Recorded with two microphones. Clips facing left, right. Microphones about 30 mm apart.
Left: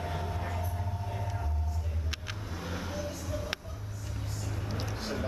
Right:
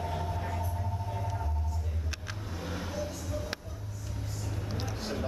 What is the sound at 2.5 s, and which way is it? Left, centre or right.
Vehicle, centre.